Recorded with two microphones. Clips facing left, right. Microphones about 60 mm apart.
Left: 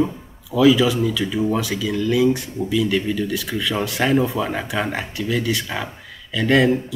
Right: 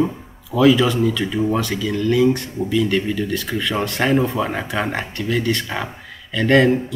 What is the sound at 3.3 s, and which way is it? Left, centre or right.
Speech, centre.